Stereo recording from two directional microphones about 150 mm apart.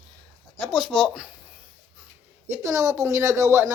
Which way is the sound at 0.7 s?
Centre (ahead or behind).